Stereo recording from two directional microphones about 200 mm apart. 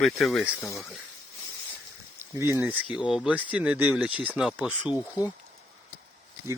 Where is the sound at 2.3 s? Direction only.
10° right (ahead or behind).